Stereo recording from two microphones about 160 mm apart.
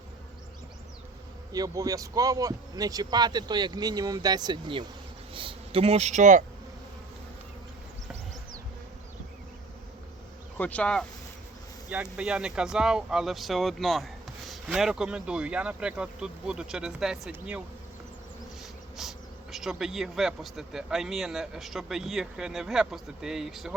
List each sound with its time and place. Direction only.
1.5 s speech: 20° right (ahead or behind); by 6.4 s 50° right (ahead or behind)
10.6 s speech: 10° left (ahead or behind)
12.1 s speech: 5° right (ahead or behind)
18.9 s speech: centre (ahead or behind)